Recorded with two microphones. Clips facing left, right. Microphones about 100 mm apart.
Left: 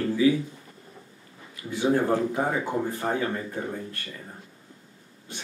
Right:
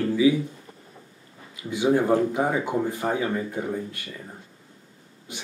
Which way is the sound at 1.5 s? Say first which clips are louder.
Right 2 dB; 15° right (ahead or behind).